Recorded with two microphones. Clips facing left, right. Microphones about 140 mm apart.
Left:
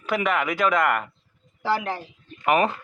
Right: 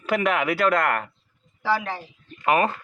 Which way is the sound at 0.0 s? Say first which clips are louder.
Right 1 dB; 10° right (ahead or behind).